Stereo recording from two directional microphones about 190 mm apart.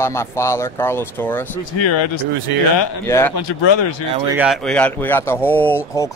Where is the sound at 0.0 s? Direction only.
15° left (ahead or behind).